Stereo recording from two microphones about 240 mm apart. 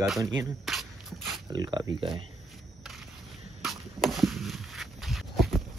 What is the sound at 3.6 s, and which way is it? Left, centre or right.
Arrow, centre.